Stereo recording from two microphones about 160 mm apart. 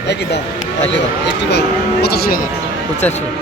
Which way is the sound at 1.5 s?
90° left.